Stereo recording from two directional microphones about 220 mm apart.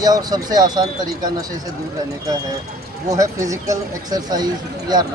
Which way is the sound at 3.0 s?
15° right (ahead or behind).